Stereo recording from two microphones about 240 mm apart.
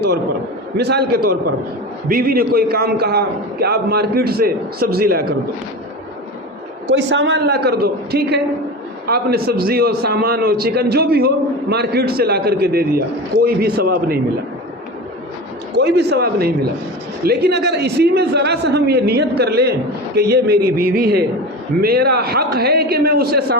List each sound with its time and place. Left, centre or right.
0.8 s a man's voice: right
6.8 s a man's voice: right
15.7 s a man's voice: right